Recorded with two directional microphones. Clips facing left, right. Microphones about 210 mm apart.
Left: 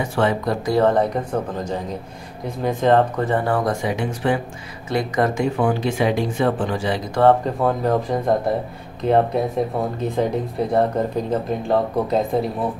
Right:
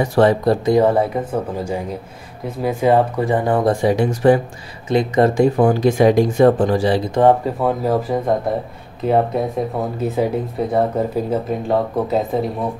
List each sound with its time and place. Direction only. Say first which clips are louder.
0.0 s speech: right 6 dB; 35° right (ahead or behind)
0.7 s speech: right 1 dB; 15° right (ahead or behind)
3.8 s speech: right 8 dB; 40° right (ahead or behind)
4.8 s speech: right 5 dB; 25° right (ahead or behind)
5.6 s speech: right 5 dB; 40° right (ahead or behind)
7.2 s speech: even; 15° right (ahead or behind)
7.6 s speech: right 1 dB; 5° right (ahead or behind)